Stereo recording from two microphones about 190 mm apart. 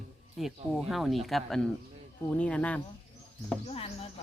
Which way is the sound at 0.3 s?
Centre (ahead or behind).